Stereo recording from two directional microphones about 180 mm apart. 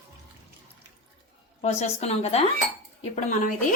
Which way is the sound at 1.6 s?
35° left (ahead or behind).